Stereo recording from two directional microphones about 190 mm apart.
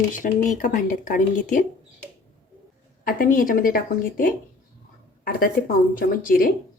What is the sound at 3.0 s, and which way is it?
Speech, 45° left (ahead or behind).